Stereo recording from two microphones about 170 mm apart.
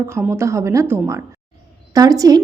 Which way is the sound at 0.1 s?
15° right (ahead or behind).